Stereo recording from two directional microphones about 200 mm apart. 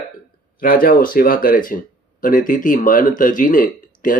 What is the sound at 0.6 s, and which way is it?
Speech, 45° left (ahead or behind).